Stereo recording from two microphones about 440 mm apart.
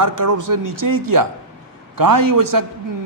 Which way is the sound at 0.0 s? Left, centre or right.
Right.